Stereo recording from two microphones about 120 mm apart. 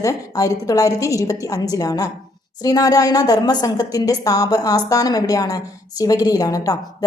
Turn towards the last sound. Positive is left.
turn(degrees=30)  # may be behind; listen again after turning